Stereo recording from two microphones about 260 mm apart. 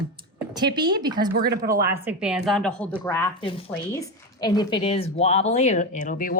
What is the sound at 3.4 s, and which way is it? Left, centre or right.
A woman's voice, left.